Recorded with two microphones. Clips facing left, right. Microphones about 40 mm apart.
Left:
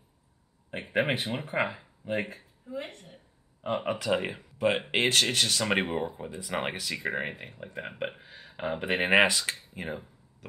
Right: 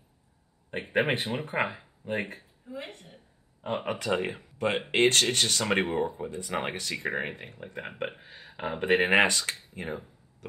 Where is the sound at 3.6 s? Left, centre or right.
Centre.